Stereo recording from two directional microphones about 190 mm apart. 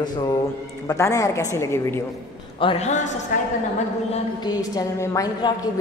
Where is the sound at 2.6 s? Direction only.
35° left (ahead or behind).